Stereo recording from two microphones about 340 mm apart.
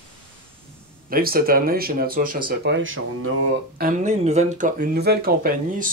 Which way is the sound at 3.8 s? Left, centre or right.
Right.